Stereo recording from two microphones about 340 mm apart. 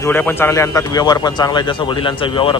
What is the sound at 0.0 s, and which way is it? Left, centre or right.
Speech, centre.